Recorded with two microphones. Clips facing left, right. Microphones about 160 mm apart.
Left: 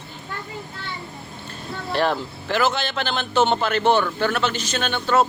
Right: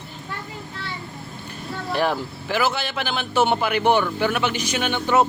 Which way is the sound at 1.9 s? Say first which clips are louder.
Left 1 dB; 10° right (ahead or behind).